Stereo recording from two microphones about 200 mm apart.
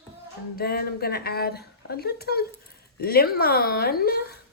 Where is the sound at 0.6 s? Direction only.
50° left (ahead or behind).